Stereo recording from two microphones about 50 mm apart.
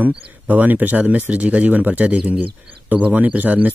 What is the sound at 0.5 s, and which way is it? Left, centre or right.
Speech, right.